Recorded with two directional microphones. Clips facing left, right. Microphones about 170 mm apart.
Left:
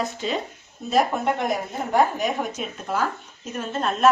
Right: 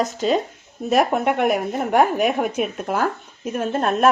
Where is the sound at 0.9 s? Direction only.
65° right (ahead or behind).